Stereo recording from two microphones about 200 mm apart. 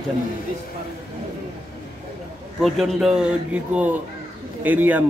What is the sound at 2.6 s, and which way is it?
A man's voice, centre (ahead or behind).